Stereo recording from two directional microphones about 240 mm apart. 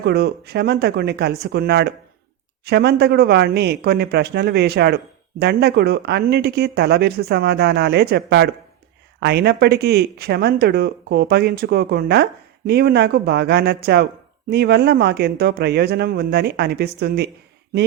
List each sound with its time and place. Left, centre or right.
0.0 s speech: right